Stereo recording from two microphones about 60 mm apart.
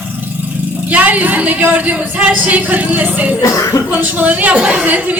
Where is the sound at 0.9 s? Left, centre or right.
Right.